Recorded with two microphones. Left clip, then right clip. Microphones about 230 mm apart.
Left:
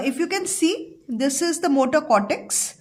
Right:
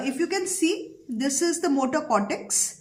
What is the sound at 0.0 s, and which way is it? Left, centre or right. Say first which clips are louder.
A woman's voice: left 3 dB; left.